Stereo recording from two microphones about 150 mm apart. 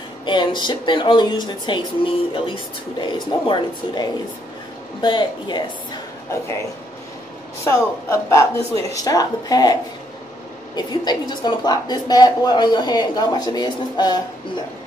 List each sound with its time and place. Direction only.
0.2 s a woman's voice: 30° left (ahead or behind)
7.6 s a woman's voice: 20° left (ahead or behind)
10.8 s a woman's voice: 30° left (ahead or behind)